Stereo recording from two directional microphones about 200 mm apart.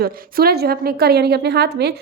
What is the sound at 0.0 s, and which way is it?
A woman's voice, 50° right (ahead or behind).